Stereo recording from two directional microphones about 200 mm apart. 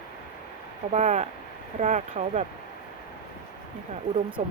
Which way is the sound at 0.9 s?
35° right (ahead or behind).